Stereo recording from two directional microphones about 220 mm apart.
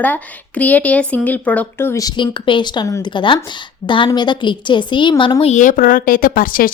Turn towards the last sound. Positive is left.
turn(degrees=40)  # may be behind; listen again after turning